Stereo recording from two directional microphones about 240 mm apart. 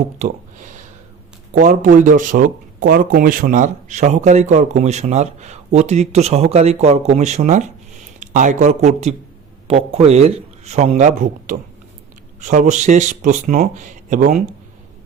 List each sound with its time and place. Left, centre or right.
0.0 s speech: right